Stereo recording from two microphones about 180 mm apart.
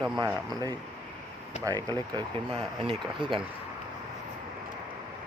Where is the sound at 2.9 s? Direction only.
30° right (ahead or behind).